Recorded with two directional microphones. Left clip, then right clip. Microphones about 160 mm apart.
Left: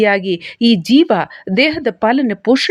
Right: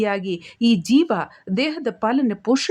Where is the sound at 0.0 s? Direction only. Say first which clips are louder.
Left 9 dB; 15° left (ahead or behind).